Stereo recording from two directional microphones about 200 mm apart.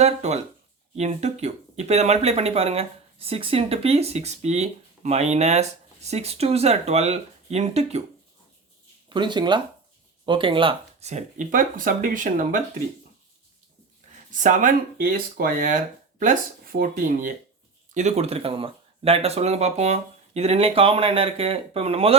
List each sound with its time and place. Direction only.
0.0 s speech: 35° right (ahead or behind)
9.0 s speech: 25° right (ahead or behind); by 12.6 s 40° right (ahead or behind)
14.4 s speech: 40° right (ahead or behind)